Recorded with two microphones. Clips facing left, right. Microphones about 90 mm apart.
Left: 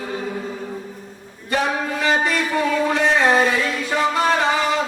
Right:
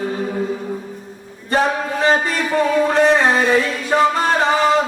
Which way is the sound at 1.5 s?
35° right (ahead or behind).